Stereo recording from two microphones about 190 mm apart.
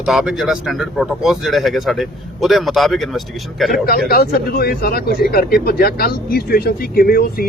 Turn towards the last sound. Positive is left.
turn(degrees=50)  # may be behind; listen again after turning